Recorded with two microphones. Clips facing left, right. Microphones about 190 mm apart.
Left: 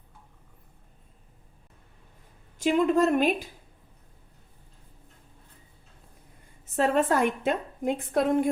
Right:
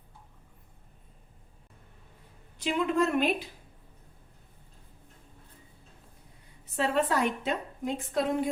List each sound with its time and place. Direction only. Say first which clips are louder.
2.6 s a woman's voice: left 5 dB; 45° left (ahead or behind)
6.7 s a woman's voice: left 4 dB; 45° left (ahead or behind)